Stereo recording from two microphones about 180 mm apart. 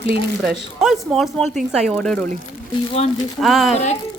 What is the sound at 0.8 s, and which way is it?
Speech, centre (ahead or behind).